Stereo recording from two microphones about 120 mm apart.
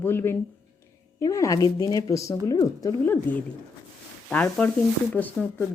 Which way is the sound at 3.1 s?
15° left (ahead or behind).